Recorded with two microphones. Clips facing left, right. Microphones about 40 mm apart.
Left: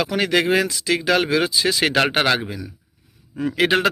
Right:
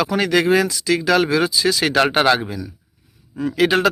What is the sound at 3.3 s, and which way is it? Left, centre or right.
Speech, left.